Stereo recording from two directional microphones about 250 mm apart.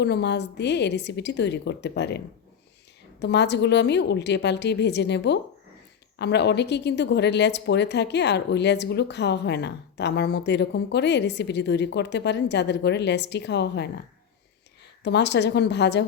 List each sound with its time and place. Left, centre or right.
0.0 s speech: left
15.0 s speech: left